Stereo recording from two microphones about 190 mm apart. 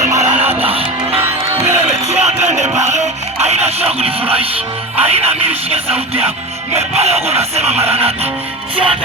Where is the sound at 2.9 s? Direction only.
35° right (ahead or behind).